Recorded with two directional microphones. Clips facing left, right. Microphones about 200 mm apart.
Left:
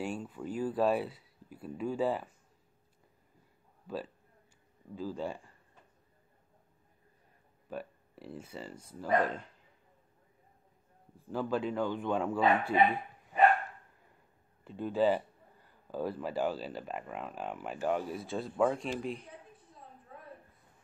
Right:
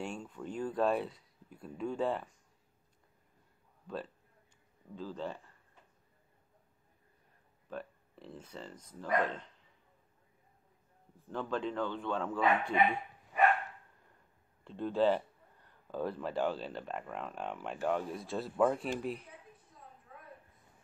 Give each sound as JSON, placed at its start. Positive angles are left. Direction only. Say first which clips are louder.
{"t": 0.0, "sound": "speech", "louder": "left 3 dB", "side_deg": 5}
{"t": 3.8, "sound": "a man's voice", "louder": "left 2 dB", "side_deg": 5}
{"t": 7.7, "sound": "a man's voice", "louder": "left 2 dB", "side_deg": 10}
{"t": 11.3, "sound": "a man's voice", "louder": "left 3 dB", "side_deg": 10}
{"t": 14.6, "sound": "speech", "louder": "left 1 dB", "side_deg": 5}
{"t": 20.1, "sound": "a sound", "louder": "left 4 dB", "side_deg": 30}